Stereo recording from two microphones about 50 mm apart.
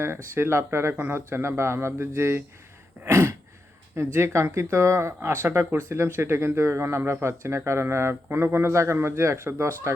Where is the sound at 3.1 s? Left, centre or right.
Right.